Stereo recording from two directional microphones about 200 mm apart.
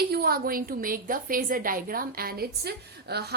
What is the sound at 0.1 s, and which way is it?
A woman's voice, 50° right (ahead or behind).